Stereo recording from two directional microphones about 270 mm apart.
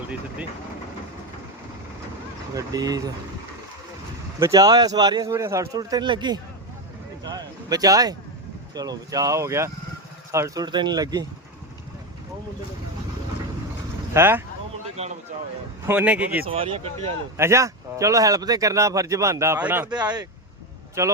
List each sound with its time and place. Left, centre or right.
2.6 s speech: centre
4.4 s speech: centre
14.1 s speech: centre
15.0 s speech: right
15.9 s speech: centre
16.5 s speech: centre
17.3 s speech: centre